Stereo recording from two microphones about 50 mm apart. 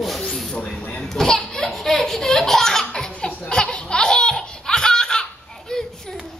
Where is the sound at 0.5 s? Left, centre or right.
Left.